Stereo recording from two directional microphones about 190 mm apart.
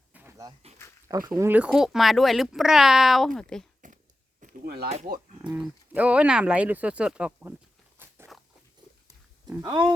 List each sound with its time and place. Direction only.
0.1 s a sound: 10° right (ahead or behind)
1.0 s speech: 15° right (ahead or behind); by 3.7 s centre (ahead or behind)
4.4 s a sound: 50° right (ahead or behind)
5.4 s speech: 5° right (ahead or behind)
8.3 s biting: centre (ahead or behind)
9.5 s speech: 20° right (ahead or behind)